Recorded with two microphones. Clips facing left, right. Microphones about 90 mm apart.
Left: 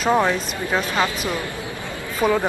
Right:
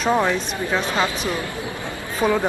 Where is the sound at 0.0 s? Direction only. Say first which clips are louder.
Left 1 dB; 10° left (ahead or behind).